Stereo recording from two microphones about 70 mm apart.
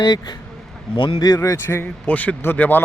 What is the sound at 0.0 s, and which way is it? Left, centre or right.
Speech, left.